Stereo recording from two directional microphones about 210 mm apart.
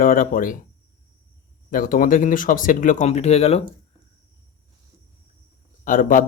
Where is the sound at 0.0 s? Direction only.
40° left (ahead or behind).